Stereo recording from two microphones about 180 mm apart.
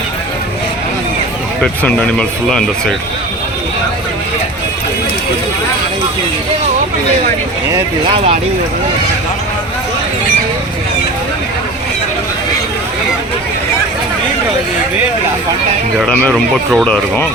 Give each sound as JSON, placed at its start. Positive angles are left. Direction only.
{"t": 1.6, "sound": "speech", "side_deg": 5}
{"t": 8.1, "sound": "speech", "side_deg": -35}
{"t": 16.0, "sound": "speech", "side_deg": 5}